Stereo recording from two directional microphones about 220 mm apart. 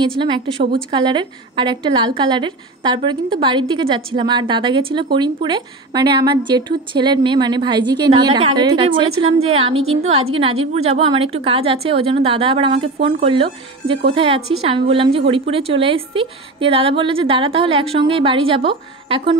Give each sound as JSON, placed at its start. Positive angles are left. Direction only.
{"t": 0.2, "sound": "a woman's voice", "side_deg": -20}